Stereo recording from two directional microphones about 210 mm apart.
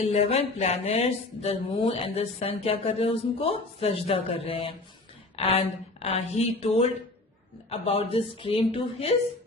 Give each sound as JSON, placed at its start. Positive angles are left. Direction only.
{"t": 0.0, "sound": "speech", "side_deg": 30}